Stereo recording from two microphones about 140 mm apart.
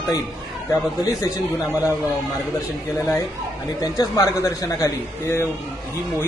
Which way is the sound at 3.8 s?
25° left (ahead or behind).